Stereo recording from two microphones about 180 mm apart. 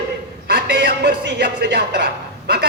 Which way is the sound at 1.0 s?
75° right (ahead or behind).